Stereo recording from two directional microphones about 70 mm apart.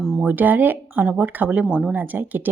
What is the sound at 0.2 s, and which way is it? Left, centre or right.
Speech, right.